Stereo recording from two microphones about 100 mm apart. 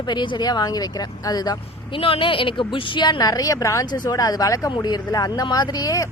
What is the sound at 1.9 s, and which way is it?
A woman's voice, 65° left (ahead or behind).